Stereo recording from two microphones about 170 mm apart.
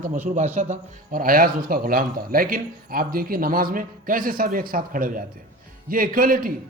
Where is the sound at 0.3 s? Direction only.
40° right (ahead or behind).